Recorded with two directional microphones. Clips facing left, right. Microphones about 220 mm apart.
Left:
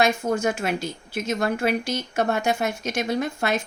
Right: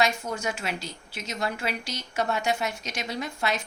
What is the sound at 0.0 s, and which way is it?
A woman's voice, 50° left (ahead or behind).